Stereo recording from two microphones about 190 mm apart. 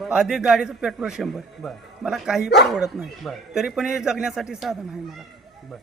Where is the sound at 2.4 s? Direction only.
60° left (ahead or behind).